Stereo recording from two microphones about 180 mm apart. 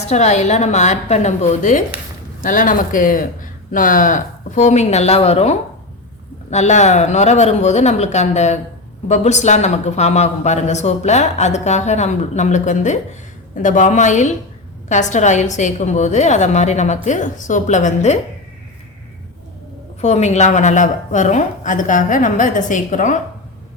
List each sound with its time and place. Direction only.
0.1 s a woman's voice: 40° left (ahead or behind)
20.0 s a woman's voice: 40° left (ahead or behind)